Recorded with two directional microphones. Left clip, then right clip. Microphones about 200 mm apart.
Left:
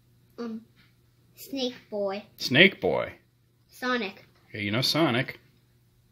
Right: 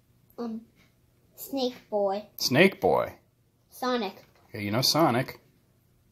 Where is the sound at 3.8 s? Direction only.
5° left (ahead or behind).